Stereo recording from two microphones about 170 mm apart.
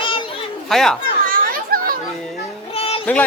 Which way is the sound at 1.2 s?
55° right (ahead or behind).